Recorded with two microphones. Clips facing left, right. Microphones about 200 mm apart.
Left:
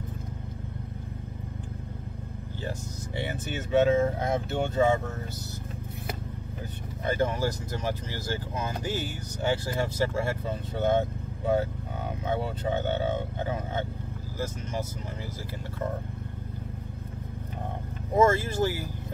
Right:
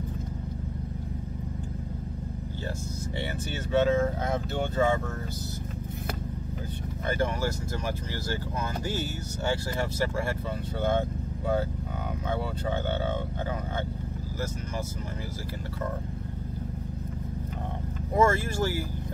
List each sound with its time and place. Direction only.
3.3 s speech: 20° left (ahead or behind)
7.1 s speech: 20° left (ahead or behind)
18.1 s speech: 20° left (ahead or behind)